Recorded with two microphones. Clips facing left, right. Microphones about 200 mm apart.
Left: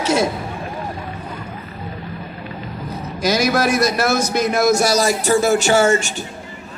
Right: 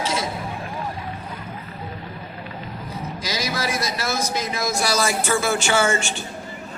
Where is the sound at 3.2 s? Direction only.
70° left (ahead or behind).